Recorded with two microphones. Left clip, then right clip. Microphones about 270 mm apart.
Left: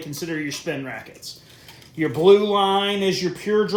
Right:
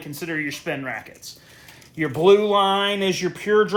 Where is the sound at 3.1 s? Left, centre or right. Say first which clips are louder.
Even; centre.